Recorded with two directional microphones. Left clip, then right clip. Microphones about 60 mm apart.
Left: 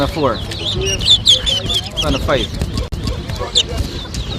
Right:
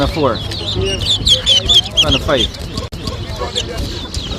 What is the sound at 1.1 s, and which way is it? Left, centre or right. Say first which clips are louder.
Bird: left 6 dB; left.